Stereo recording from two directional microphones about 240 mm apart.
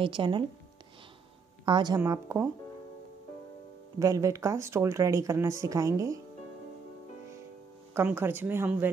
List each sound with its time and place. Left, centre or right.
0.0 s speech: right
1.7 s speech: centre
4.0 s speech: centre
7.9 s speech: centre